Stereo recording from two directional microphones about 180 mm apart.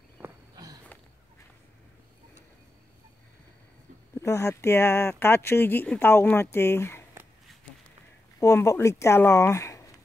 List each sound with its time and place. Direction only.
0.2 s a sound: 20° right (ahead or behind)
4.2 s speech: 15° left (ahead or behind)
8.4 s speech: 15° left (ahead or behind)